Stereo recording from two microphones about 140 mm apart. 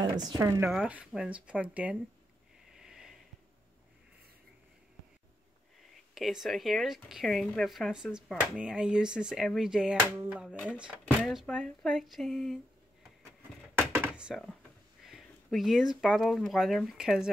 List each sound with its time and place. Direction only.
0.3 s speech: 25° right (ahead or behind)
0.7 s speech: 5° right (ahead or behind)
2.8 s a sound: 5° right (ahead or behind)
6.1 s speech: centre (ahead or behind)
13.9 s a sound: 10° right (ahead or behind)
15.0 s speech: centre (ahead or behind)